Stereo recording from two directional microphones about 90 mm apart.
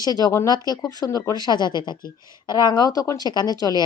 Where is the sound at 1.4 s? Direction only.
55° left (ahead or behind).